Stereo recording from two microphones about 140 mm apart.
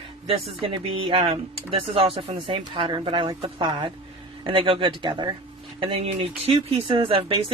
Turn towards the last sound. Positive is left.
turn(degrees=-40)  # may be behind; listen again after turning